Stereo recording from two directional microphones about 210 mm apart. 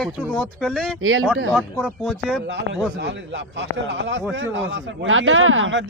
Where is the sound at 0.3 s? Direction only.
5° left (ahead or behind).